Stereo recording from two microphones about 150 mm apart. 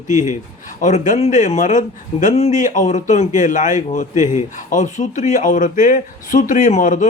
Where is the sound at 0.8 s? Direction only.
55° left (ahead or behind).